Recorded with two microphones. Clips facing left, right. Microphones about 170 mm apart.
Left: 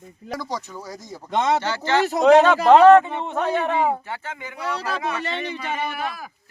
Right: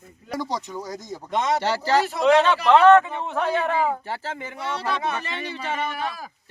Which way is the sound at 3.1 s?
20° left (ahead or behind).